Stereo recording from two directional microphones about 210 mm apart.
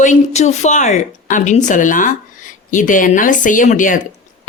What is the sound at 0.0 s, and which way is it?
Speech, 35° left (ahead or behind).